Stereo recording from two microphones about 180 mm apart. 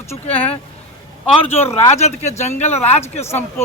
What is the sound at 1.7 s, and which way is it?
Speech, 40° left (ahead or behind).